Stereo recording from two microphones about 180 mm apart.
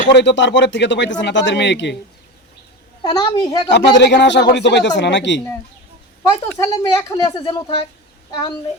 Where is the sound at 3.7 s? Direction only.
75° left (ahead or behind).